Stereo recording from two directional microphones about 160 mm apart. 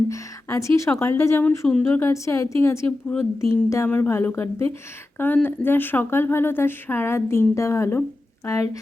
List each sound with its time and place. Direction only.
0.1 s a woman's voice: 20° left (ahead or behind)